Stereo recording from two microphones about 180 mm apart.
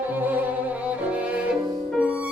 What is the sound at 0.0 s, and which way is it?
Music, 10° right (ahead or behind).